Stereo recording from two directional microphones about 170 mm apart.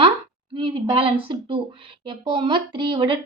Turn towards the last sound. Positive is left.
turn(degrees=-30)  # may be behind; listen again after turning